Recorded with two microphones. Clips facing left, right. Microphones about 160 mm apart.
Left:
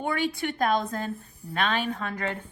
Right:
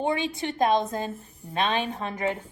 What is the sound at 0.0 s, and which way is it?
A woman's voice, 25° right (ahead or behind).